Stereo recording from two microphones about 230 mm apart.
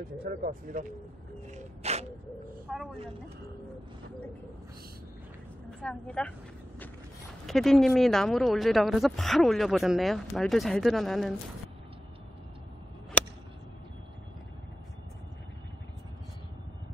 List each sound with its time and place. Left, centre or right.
0.2 s speech: right
1.5 s a sound: right
2.7 s speech: centre
5.8 s speech: centre
7.4 s speech: centre